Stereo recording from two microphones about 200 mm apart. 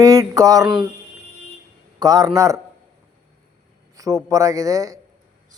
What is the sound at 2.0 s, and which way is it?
Speech, 20° right (ahead or behind).